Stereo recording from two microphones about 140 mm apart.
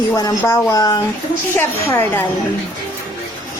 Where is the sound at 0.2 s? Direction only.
20° left (ahead or behind).